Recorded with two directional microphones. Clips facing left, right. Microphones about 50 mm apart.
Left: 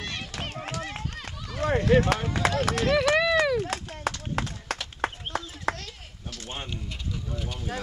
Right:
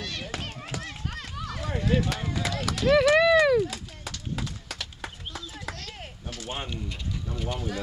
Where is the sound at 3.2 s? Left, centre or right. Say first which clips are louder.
Right 4 dB; centre.